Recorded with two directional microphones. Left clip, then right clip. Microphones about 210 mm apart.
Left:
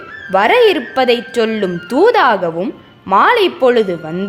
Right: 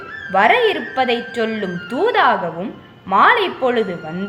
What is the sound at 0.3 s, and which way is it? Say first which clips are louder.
Speech: left 4 dB; 55° left (ahead or behind).